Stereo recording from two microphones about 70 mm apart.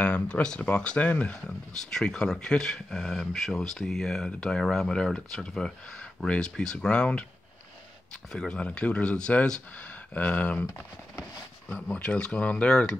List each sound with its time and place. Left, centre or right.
0.0 s speech: centre
8.3 s speech: centre
11.7 s speech: centre